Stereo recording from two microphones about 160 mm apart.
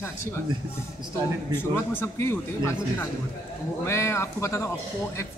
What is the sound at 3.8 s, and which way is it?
Speech, 15° left (ahead or behind).